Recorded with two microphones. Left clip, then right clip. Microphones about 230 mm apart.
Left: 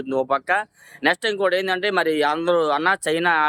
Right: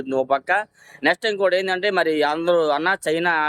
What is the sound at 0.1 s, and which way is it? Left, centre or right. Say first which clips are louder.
Speech: right 1 dB; centre.